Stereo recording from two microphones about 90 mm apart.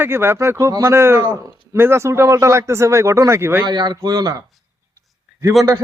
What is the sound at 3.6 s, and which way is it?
Speech, 55° right (ahead or behind).